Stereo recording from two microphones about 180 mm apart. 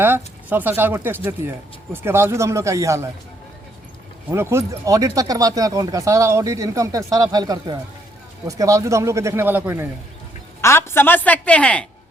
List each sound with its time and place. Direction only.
0.0 s speech: 10° right (ahead or behind)
4.3 s speech: 15° right (ahead or behind)
10.6 s a woman's voice: 15° left (ahead or behind)